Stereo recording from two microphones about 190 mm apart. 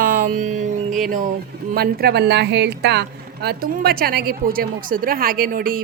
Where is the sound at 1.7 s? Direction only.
55° right (ahead or behind).